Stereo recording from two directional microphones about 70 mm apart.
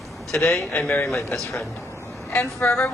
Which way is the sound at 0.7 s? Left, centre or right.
Left.